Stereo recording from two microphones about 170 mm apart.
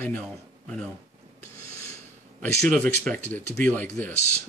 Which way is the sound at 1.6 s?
40° left (ahead or behind).